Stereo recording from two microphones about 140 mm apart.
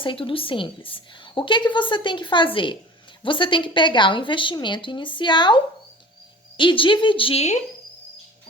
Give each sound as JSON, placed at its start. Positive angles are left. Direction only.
{"t": 0.0, "sound": "a woman's voice", "side_deg": 40}
{"t": 6.6, "sound": "a woman's voice", "side_deg": 35}